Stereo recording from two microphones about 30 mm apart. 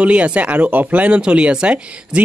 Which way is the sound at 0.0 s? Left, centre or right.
Right.